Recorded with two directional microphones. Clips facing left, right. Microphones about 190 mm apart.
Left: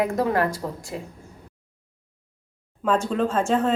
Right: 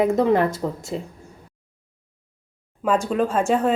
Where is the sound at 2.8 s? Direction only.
10° right (ahead or behind).